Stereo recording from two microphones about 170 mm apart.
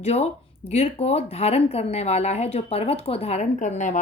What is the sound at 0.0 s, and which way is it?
Speech, 40° left (ahead or behind).